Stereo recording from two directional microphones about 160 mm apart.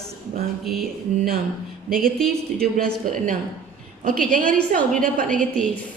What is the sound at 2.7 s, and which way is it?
Speech, 60° right (ahead or behind).